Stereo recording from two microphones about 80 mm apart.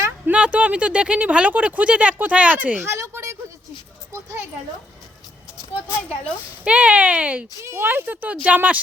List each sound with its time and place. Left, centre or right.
0.3 s speech: centre
2.8 s a sound: right
6.7 s speech: centre
7.6 s speech: right
7.9 s speech: right